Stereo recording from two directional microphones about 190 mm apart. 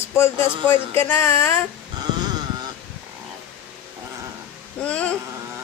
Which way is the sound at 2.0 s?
20° right (ahead or behind).